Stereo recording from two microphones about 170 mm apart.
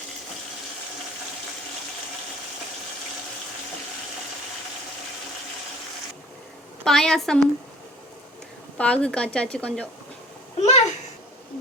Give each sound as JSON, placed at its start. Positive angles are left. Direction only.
{"t": 6.8, "sound": "a woman's voice", "side_deg": 5}
{"t": 8.8, "sound": "a woman's voice", "side_deg": 5}
{"t": 10.6, "sound": "a sound", "side_deg": 40}